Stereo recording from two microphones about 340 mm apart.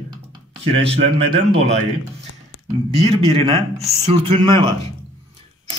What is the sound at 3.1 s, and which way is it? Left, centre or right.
A man's voice, centre.